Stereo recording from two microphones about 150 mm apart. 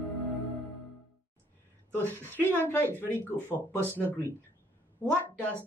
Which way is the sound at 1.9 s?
15° left (ahead or behind).